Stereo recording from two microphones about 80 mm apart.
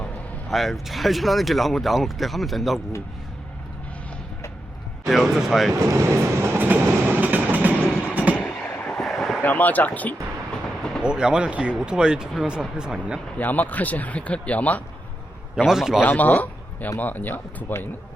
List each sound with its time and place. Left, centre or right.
0.5 s speech: centre
5.0 s speech: centre
5.9 s train: right
8.1 s vehicle: centre
8.6 s vehicle: left
9.0 s vehicle: centre
9.4 s speech: left
11.0 s speech: centre
13.4 s speech: left
15.5 s speech: centre
16.0 s a man's voice: left